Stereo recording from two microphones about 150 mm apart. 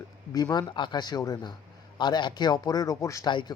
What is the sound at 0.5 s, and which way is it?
A man's voice, 30° left (ahead or behind).